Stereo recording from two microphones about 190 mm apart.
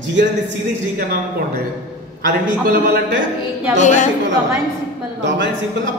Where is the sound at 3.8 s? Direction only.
40° left (ahead or behind).